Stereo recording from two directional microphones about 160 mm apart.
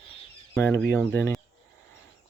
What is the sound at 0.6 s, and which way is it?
Speech, 15° left (ahead or behind).